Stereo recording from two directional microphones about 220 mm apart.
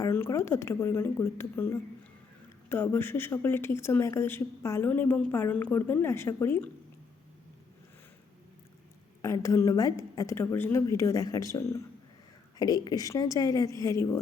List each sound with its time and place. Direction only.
0.0 s speech: 15° left (ahead or behind)
9.2 s speech: 15° left (ahead or behind)